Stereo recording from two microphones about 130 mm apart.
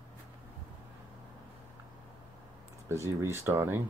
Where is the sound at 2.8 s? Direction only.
20° right (ahead or behind).